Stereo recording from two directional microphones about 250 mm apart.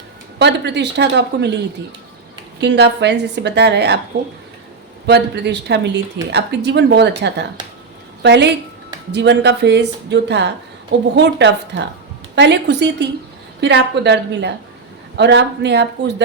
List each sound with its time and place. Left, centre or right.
0.3 s a woman's voice: right
2.6 s a woman's voice: right
5.0 s a woman's voice: right